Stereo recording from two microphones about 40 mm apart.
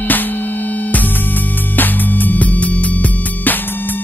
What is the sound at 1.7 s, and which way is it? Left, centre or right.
Music, left.